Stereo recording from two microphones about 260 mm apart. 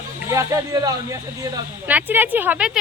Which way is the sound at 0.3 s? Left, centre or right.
Centre.